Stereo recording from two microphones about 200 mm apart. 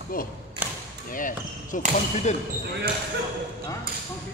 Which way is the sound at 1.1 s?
40° left (ahead or behind).